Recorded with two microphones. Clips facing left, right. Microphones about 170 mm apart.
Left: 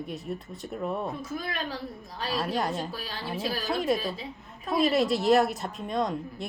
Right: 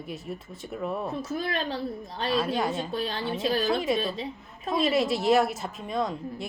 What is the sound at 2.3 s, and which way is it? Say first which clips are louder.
Speech: right 2 dB; centre (ahead or behind).